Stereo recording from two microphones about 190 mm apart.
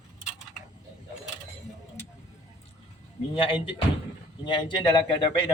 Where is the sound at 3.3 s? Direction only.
30° left (ahead or behind).